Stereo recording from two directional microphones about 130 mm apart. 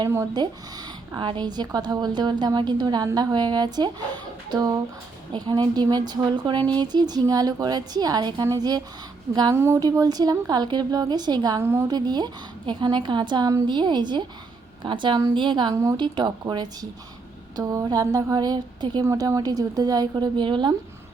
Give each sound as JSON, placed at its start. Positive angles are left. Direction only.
{"t": 0.4, "sound": "a woman's voice", "side_deg": -30}
{"t": 9.6, "sound": "a woman's voice", "side_deg": -20}
{"t": 11.6, "sound": "a woman's voice", "side_deg": -20}
{"t": 11.9, "sound": "a woman's voice", "side_deg": -35}